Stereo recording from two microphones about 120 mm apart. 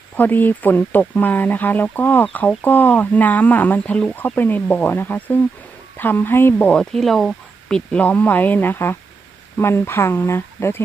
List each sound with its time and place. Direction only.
0.2 s speech: 15° left (ahead or behind)